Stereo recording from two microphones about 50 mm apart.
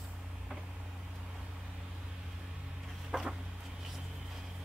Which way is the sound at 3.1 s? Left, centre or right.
Centre.